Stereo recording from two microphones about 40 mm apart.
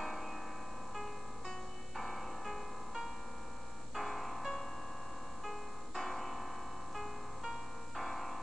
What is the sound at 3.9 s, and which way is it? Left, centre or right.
Music, centre.